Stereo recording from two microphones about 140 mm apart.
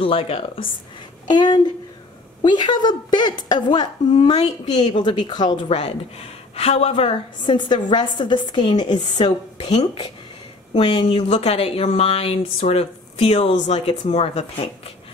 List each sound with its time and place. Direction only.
0.0 s a woman's voice: 40° left (ahead or behind)
1.2 s a woman's voice: 30° left (ahead or behind)
4.2 s speech: 50° left (ahead or behind)
4.7 s a woman's voice: 35° left (ahead or behind)
6.5 s a woman's voice: 45° left (ahead or behind)